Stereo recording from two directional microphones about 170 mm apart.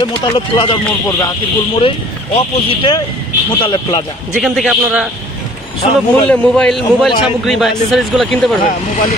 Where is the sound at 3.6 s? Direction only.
25° left (ahead or behind).